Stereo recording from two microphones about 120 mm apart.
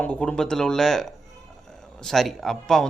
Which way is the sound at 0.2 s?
5° left (ahead or behind).